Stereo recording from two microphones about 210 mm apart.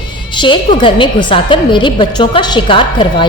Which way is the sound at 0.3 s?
25° left (ahead or behind).